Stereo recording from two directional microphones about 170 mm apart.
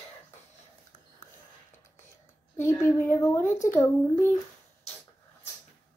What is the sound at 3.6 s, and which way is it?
Speech, 15° left (ahead or behind).